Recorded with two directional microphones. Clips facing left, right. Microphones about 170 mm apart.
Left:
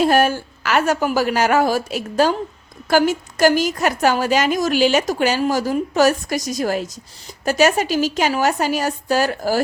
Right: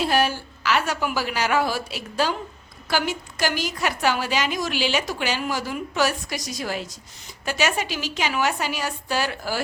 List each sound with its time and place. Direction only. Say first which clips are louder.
0.0 s a woman's voice: left 6 dB; 50° left (ahead or behind)